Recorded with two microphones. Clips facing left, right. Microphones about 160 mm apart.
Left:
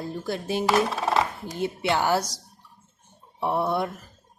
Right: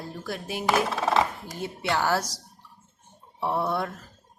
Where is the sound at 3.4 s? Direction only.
15° left (ahead or behind).